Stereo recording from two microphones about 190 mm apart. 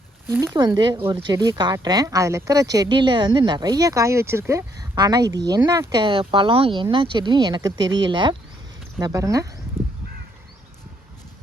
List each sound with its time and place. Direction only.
0.3 s speech: 10° right (ahead or behind)